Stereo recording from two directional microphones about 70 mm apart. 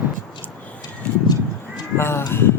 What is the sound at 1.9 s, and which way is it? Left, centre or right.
Speech, left.